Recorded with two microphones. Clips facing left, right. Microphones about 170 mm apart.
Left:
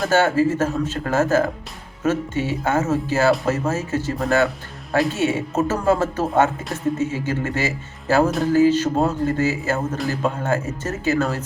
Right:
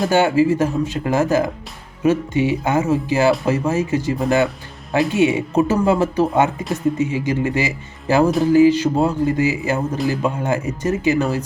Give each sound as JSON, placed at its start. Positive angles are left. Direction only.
{"t": 0.1, "sound": "speech", "side_deg": -15}